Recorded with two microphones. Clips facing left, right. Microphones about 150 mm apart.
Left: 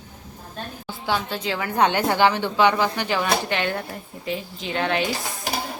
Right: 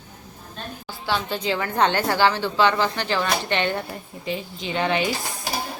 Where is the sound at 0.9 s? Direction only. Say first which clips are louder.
Left 1 dB; 15° left (ahead or behind).